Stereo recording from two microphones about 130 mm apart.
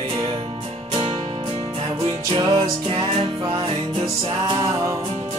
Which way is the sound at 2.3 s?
40° right (ahead or behind).